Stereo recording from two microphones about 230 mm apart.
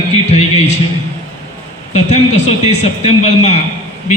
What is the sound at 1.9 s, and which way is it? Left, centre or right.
A man's voice, left.